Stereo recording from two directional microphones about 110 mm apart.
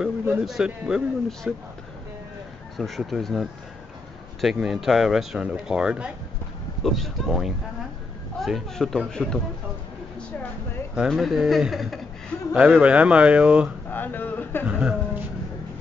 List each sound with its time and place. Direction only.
0.0 s a man's voice: 5° right (ahead or behind)
2.8 s speech: centre (ahead or behind)
11.0 s speech: centre (ahead or behind)
13.8 s a sound: 20° left (ahead or behind)
14.7 s speech: 10° right (ahead or behind)